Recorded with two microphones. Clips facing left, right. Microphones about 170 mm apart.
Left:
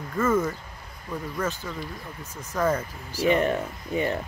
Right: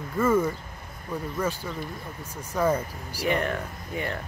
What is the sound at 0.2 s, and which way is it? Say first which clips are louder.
Speech: right 1 dB; 10° right (ahead or behind).